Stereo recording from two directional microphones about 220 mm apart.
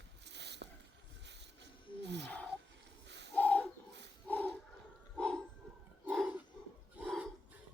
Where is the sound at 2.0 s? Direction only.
50° right (ahead or behind).